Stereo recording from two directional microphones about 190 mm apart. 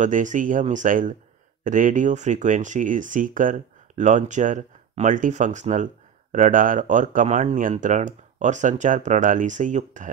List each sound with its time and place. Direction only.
0.0 s speech: 40° right (ahead or behind)